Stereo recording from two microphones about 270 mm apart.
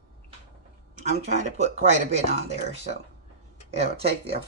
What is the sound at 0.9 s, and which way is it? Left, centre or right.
Speech, right.